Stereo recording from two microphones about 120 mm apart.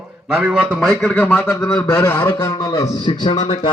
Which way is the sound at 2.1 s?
15° left (ahead or behind).